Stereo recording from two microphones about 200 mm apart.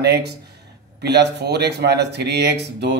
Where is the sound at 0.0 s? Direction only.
55° right (ahead or behind).